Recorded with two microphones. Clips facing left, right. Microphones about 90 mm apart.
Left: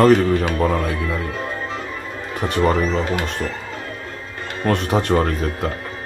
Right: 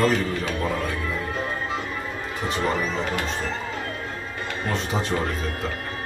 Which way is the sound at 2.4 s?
55° left (ahead or behind).